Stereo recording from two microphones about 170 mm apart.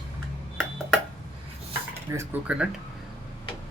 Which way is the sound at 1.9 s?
15° right (ahead or behind).